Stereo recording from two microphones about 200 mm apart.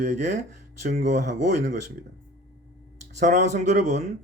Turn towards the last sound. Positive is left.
turn(degrees=-35)  # may be behind; listen again after turning